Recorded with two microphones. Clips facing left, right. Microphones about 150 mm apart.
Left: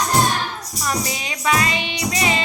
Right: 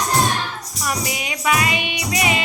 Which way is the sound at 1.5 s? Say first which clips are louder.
Even; 15° right (ahead or behind).